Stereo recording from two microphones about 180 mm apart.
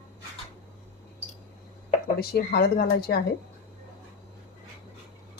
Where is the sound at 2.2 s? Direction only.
60° left (ahead or behind).